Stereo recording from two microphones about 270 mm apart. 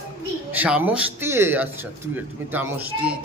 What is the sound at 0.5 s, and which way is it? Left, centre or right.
Speech, centre.